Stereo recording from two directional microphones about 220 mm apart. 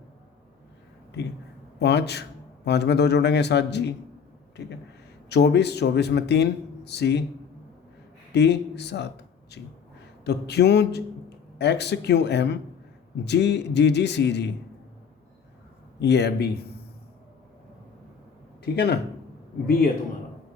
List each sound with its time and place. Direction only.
1.8 s speech: 50° left (ahead or behind)
5.3 s speech: 50° left (ahead or behind)
8.3 s speech: 50° left (ahead or behind)
16.0 s speech: 50° left (ahead or behind)
18.6 s speech: 45° left (ahead or behind)